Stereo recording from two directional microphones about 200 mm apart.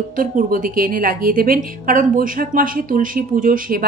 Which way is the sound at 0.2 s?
45° right (ahead or behind).